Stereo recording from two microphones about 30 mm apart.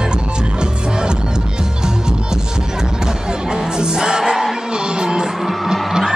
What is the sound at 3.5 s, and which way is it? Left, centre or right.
Music, right.